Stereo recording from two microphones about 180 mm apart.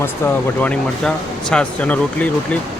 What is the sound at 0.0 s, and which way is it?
Speech, 10° left (ahead or behind).